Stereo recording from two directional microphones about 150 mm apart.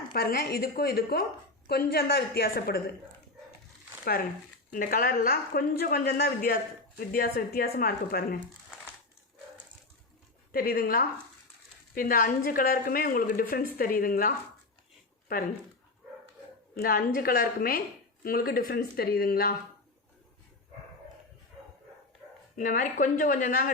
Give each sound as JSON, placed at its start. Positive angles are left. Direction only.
{"t": 0.1, "sound": "a woman's voice", "side_deg": 90}
{"t": 4.0, "sound": "speech", "side_deg": 85}
{"t": 4.7, "sound": "a woman's voice", "side_deg": 70}
{"t": 7.0, "sound": "a woman's voice", "side_deg": 75}
{"t": 10.5, "sound": "a woman's voice", "side_deg": 80}
{"t": 16.7, "sound": "a woman's voice", "side_deg": 75}
{"t": 22.5, "sound": "speech", "side_deg": 60}